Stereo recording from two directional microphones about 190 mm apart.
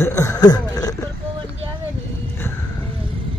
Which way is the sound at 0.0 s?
15° left (ahead or behind).